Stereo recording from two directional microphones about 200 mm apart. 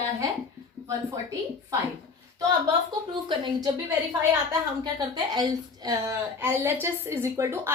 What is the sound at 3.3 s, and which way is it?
Speech, 25° right (ahead or behind).